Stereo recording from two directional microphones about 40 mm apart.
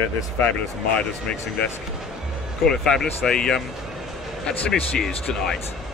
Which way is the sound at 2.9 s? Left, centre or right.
Centre.